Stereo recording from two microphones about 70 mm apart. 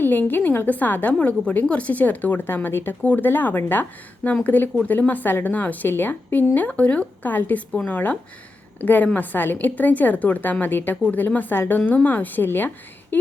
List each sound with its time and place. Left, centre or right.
0.0 s a woman's voice: left